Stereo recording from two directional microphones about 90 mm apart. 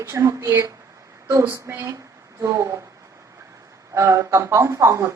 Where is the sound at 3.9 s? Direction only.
35° right (ahead or behind).